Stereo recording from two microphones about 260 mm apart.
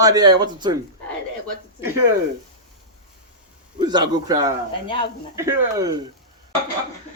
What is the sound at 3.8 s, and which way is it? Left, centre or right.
Snicker, centre.